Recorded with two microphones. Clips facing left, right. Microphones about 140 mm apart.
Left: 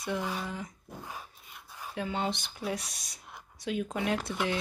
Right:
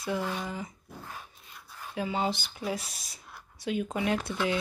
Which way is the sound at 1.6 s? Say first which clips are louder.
Left 1 dB; 15° left (ahead or behind).